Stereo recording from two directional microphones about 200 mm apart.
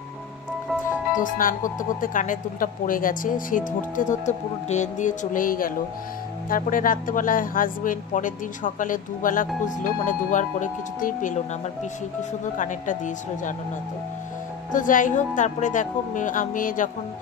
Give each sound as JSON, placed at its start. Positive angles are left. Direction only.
{"t": 1.1, "sound": "speech", "side_deg": 40}
{"t": 12.5, "sound": "speech", "side_deg": 40}
{"t": 14.7, "sound": "speech", "side_deg": 40}